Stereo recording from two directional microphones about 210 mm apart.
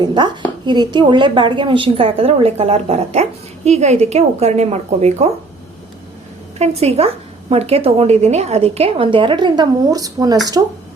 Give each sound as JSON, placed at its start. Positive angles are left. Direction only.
{"t": 0.0, "sound": "a woman's voice", "side_deg": -20}
{"t": 6.6, "sound": "a woman's voice", "side_deg": -30}